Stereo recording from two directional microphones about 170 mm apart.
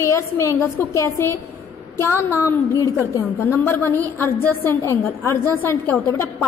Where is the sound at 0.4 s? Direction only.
15° left (ahead or behind).